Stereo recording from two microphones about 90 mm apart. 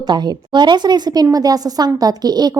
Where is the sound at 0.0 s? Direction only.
50° right (ahead or behind).